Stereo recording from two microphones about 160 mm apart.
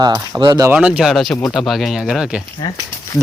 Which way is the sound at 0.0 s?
25° right (ahead or behind).